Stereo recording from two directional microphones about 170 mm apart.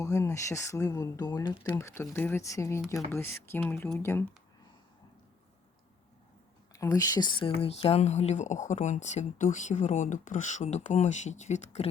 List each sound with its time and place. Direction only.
0.0 s speech: 15° left (ahead or behind)
6.7 s speech: 20° left (ahead or behind); by 11.9 s 40° left (ahead or behind)